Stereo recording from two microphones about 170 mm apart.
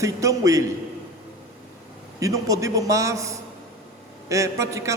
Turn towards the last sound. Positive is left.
turn(degrees=-15)  # may be behind; listen again after turning